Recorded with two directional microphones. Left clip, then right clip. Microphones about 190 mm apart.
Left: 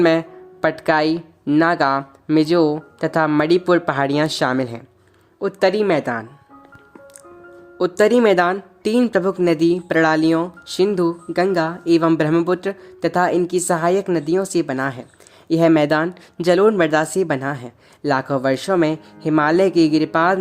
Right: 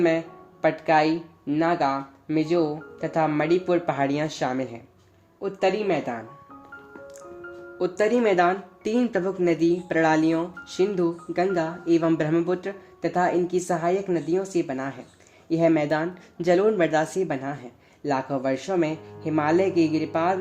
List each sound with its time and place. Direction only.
0.0 s speech: 45° left (ahead or behind)
7.8 s speech: 40° left (ahead or behind)